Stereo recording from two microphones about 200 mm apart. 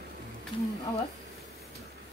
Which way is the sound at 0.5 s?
25° left (ahead or behind).